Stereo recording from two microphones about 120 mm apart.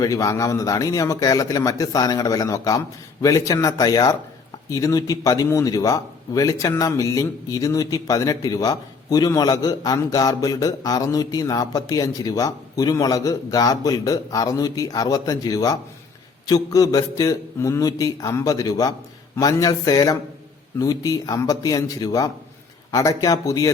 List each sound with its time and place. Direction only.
0.0 s a man's voice: 30° left (ahead or behind)